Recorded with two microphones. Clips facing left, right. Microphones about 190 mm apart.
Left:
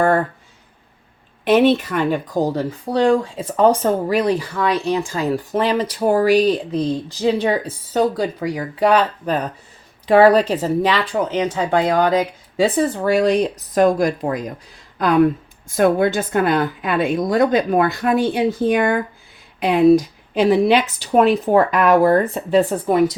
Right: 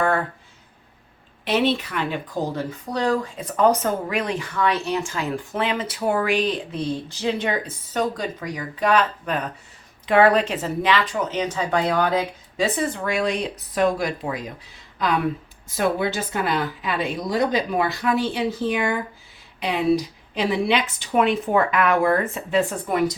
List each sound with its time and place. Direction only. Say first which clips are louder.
1.5 s a woman's voice: left 7 dB; 50° left (ahead or behind); by 23.1 s 35° left (ahead or behind)